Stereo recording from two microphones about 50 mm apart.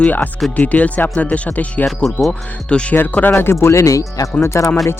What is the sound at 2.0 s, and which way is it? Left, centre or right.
Speech, centre.